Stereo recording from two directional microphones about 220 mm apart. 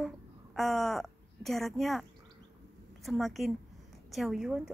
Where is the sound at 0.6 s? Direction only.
Centre (ahead or behind).